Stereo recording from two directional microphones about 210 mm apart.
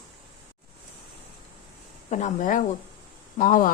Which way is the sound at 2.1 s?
35° left (ahead or behind).